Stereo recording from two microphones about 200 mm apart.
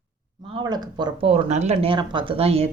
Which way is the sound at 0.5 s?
20° right (ahead or behind).